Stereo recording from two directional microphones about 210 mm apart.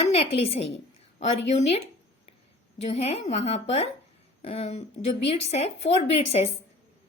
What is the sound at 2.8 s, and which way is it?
A woman's voice, 30° left (ahead or behind).